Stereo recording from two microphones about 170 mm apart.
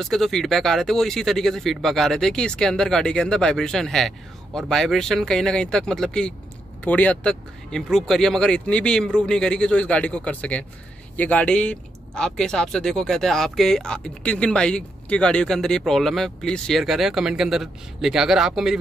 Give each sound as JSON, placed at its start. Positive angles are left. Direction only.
{"t": 0.0, "sound": "speech", "side_deg": 0}